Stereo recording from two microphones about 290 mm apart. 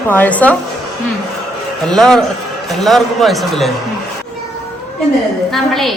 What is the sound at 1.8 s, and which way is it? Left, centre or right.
A woman's voice, centre.